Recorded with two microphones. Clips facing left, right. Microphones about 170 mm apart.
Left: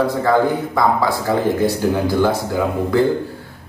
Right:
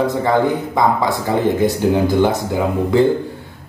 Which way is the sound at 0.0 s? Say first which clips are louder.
Even; 20° right (ahead or behind).